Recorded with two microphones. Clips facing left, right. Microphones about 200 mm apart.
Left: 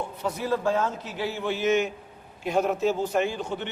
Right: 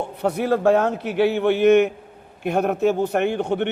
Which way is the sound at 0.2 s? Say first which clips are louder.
Right 8 dB; 65° right (ahead or behind).